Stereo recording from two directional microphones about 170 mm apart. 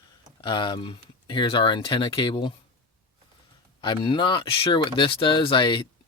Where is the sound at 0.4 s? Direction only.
30° left (ahead or behind).